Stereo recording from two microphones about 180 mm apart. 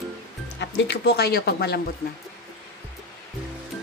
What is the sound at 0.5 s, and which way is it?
Speech, 70° left (ahead or behind).